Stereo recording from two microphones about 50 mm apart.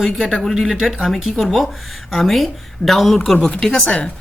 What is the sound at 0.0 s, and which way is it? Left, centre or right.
Speech, centre.